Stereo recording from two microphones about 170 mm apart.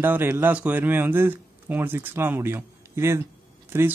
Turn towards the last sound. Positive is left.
turn(degrees=-15)  # may be behind; listen again after turning